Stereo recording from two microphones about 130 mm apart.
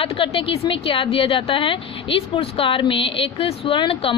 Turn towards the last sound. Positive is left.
turn(degrees=40)  # may be behind; listen again after turning